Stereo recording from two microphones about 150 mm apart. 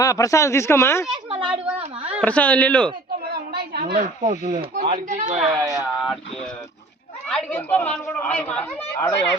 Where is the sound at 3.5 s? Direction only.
90° right.